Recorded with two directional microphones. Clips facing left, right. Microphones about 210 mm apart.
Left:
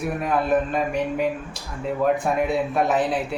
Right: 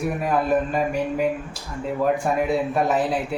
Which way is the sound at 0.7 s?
Centre (ahead or behind).